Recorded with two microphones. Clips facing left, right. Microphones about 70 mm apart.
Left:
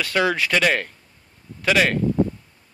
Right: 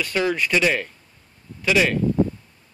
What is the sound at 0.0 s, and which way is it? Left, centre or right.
A man's voice, left.